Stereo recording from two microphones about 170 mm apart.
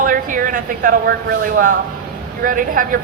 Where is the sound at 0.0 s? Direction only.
50° right (ahead or behind).